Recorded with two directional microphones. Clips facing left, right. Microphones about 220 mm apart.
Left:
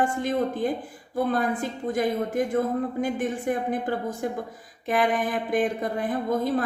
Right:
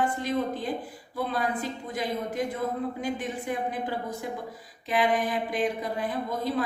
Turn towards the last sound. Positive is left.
turn(degrees=50)  # may be behind; listen again after turning